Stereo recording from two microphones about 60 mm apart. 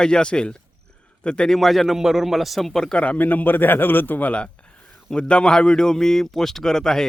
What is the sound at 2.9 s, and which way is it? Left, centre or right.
A man's voice, left.